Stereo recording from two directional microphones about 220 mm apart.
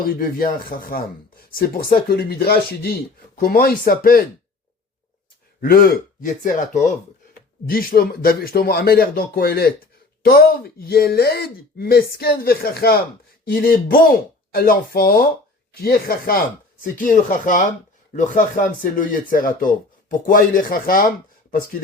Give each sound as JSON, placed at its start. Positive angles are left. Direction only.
{"t": 0.0, "sound": "speech", "side_deg": 40}
{"t": 5.5, "sound": "speech", "side_deg": 40}